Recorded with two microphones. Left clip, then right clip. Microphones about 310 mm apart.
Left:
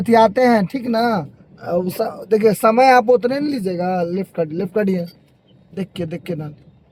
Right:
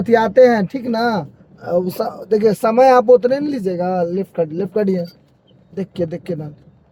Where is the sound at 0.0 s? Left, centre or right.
Left.